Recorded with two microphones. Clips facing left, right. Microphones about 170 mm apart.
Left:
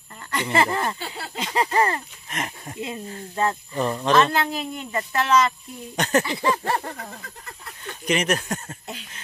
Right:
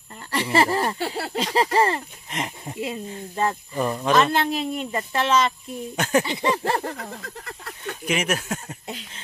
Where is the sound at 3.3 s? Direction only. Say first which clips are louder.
Even; 10° right (ahead or behind).